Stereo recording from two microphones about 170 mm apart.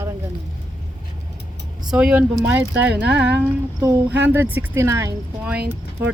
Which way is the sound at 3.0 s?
90° right.